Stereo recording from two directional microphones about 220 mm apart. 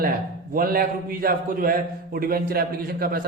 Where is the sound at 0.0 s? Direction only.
40° right (ahead or behind).